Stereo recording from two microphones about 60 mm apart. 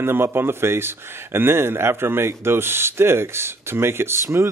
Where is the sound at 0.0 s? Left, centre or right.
Right.